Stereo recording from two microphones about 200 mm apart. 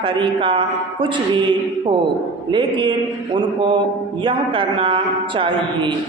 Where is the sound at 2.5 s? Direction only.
25° right (ahead or behind).